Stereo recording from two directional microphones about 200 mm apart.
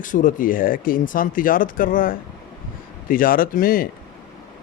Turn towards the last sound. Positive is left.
turn(degrees=45)  # may be behind; listen again after turning